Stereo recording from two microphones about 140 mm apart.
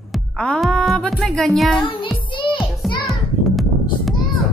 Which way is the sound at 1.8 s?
40° left (ahead or behind).